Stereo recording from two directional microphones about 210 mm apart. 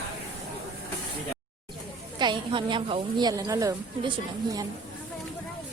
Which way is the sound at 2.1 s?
20° right (ahead or behind).